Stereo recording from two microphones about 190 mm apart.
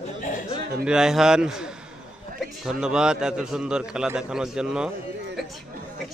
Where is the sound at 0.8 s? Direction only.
5° right (ahead or behind).